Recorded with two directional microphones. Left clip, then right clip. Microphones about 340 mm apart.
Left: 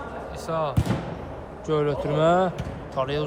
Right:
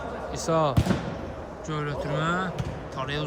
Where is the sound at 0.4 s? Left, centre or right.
Right.